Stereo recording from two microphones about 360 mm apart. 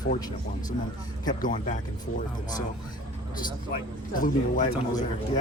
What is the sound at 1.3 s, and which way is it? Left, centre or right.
Speech, left.